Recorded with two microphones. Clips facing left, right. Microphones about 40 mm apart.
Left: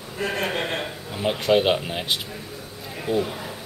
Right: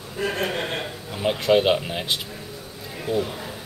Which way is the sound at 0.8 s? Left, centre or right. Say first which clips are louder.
Even; centre.